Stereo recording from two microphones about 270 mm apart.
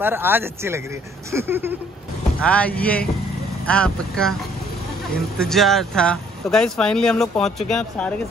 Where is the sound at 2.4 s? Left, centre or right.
Centre.